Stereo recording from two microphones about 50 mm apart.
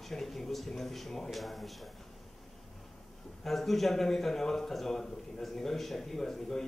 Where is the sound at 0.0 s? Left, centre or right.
Centre.